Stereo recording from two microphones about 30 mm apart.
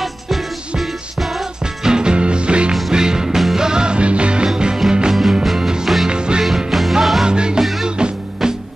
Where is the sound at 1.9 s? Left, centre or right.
Right.